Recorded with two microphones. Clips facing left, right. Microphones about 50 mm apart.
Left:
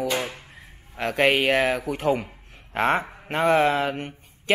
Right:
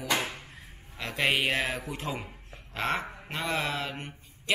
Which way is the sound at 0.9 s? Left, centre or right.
Left.